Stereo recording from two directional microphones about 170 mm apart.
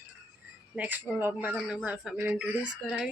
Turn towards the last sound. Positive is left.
turn(degrees=0)  # may be behind; listen again after turning